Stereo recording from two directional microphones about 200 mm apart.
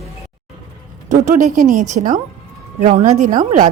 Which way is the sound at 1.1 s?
40° right (ahead or behind).